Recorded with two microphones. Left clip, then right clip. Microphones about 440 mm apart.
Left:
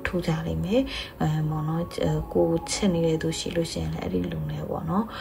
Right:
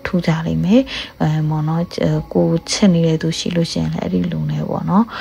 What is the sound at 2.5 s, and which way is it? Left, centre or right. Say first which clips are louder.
Speech: right 8 dB; centre.